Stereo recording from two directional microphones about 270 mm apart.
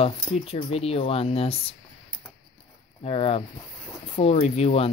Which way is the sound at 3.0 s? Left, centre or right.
Left.